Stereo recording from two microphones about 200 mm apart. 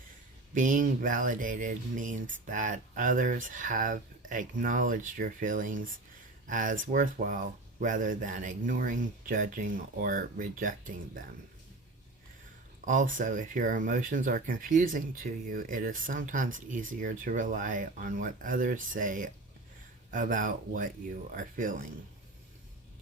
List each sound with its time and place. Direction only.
0.5 s speech: 40° right (ahead or behind)
12.8 s speech: 40° right (ahead or behind)